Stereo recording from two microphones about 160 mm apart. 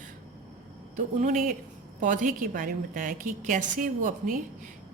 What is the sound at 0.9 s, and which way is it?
A woman's voice, 55° right (ahead or behind).